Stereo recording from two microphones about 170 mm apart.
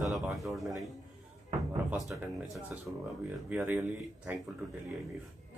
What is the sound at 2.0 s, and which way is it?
Speech, centre (ahead or behind).